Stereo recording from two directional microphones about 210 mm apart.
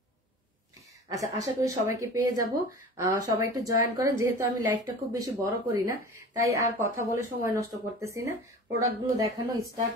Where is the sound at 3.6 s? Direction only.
15° right (ahead or behind).